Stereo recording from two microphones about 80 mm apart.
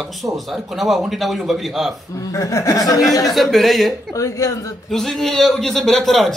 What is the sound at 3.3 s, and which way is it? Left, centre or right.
Speech, centre.